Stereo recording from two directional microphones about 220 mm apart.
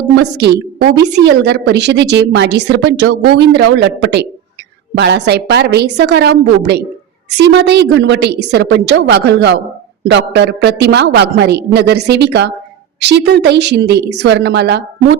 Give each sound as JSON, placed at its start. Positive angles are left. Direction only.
{"t": 0.2, "sound": "a woman's voice", "side_deg": -50}